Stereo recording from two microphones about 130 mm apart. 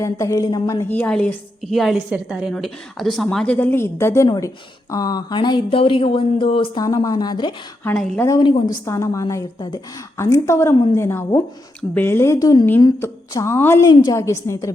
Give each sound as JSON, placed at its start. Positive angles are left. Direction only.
{"t": 0.0, "sound": "a woman's voice", "side_deg": 25}
{"t": 0.8, "sound": "a woman's voice", "side_deg": 15}
{"t": 6.8, "sound": "a woman's voice", "side_deg": 25}
{"t": 8.8, "sound": "a woman's voice", "side_deg": 20}
{"t": 13.8, "sound": "a woman's voice", "side_deg": 35}
{"t": 14.2, "sound": "a woman's voice", "side_deg": 20}